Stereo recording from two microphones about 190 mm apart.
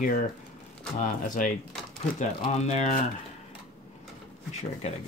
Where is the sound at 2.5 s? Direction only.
35° left (ahead or behind).